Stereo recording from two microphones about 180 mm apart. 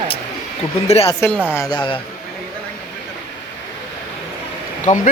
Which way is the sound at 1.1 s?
10° left (ahead or behind).